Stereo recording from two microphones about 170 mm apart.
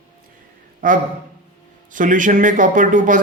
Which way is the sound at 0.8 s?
55° right (ahead or behind).